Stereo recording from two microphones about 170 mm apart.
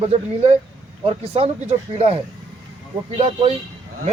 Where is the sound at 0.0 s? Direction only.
35° right (ahead or behind).